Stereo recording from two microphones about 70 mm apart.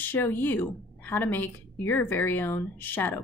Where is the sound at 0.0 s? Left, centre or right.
Left.